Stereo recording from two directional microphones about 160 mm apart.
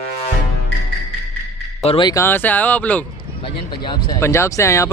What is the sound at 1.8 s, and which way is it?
Music, 35° left (ahead or behind).